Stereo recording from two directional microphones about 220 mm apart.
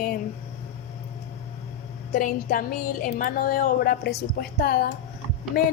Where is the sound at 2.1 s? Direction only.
40° left (ahead or behind).